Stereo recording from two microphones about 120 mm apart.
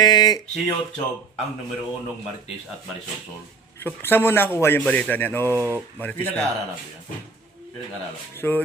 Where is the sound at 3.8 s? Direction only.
15° left (ahead or behind).